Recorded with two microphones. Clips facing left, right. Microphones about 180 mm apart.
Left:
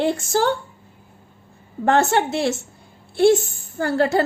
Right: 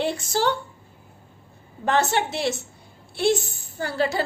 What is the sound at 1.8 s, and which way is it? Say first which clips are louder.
A woman's voice: left 4 dB; 50° left (ahead or behind).